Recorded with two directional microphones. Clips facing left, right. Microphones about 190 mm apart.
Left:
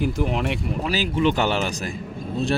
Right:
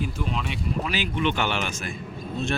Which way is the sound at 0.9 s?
35° left (ahead or behind).